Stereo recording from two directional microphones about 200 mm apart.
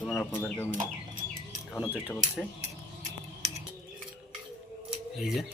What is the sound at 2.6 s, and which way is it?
Scissors, 35° right (ahead or behind).